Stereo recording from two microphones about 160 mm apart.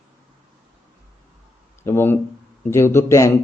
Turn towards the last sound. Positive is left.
turn(degrees=15)  # may be behind; listen again after turning